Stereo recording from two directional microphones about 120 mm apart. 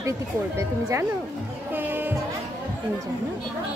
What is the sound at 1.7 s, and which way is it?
Music, 15° right (ahead or behind).